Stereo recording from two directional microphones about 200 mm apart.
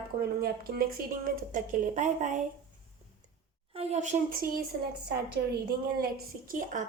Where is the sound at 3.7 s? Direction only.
35° right (ahead or behind).